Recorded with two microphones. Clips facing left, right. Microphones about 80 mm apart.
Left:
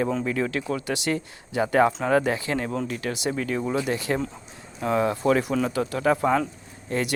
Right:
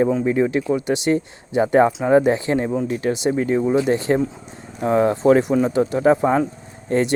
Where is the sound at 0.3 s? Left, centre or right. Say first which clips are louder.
Right 8 dB; right.